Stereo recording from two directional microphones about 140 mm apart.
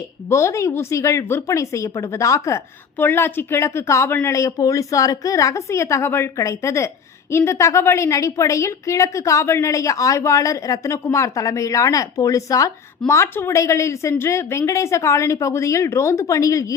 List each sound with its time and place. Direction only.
0.3 s speech: 20° left (ahead or behind)